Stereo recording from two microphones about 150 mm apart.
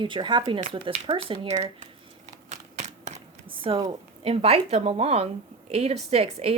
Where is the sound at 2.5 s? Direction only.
50° right (ahead or behind).